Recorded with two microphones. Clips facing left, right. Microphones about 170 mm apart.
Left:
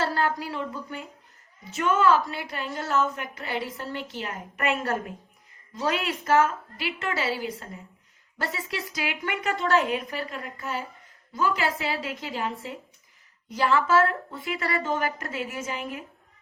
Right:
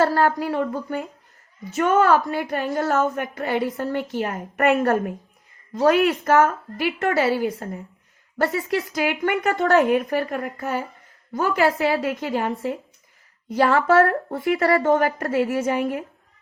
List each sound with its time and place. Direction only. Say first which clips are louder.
0.0 s a woman's voice: right 7 dB; 55° right (ahead or behind)